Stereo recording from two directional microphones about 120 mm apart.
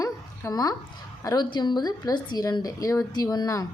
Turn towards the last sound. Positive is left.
turn(degrees=30)  # may be behind; listen again after turning